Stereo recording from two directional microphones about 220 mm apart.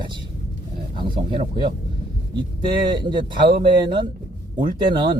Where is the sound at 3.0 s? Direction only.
20° right (ahead or behind).